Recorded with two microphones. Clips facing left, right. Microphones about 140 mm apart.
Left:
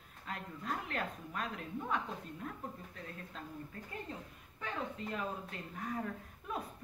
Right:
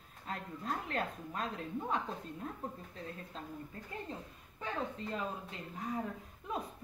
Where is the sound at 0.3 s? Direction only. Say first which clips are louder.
Right 1 dB; 35° right (ahead or behind).